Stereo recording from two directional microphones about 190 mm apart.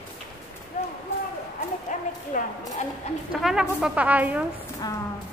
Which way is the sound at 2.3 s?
40° left (ahead or behind).